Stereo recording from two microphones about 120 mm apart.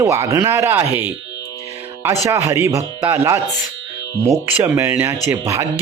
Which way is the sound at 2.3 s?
20° right (ahead or behind).